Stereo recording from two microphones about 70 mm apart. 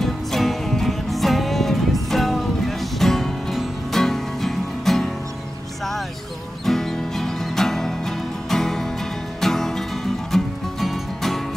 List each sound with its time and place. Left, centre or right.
0.0 s music: centre
6.6 s music: centre